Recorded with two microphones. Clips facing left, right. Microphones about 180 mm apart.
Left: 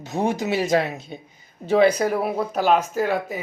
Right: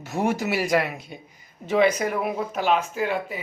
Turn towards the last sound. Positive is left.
turn(degrees=40)  # may be behind; listen again after turning